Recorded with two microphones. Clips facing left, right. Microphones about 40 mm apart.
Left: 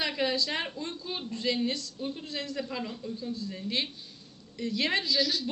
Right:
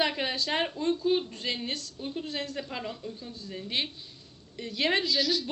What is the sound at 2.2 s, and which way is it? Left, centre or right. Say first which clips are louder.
Speech: even; right.